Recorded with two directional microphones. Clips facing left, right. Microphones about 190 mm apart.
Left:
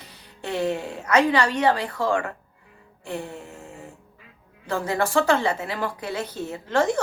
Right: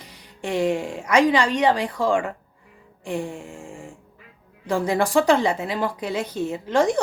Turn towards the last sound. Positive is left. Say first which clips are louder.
# right 2 dB
turn(degrees=-15)  # may be behind; listen again after turning